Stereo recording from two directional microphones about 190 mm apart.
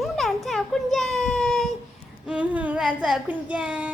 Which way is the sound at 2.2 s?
5° right (ahead or behind).